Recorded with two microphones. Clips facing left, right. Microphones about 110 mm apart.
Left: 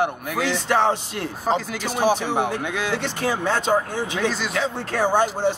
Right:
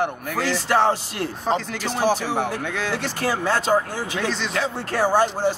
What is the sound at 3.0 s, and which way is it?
Speech, 5° right (ahead or behind).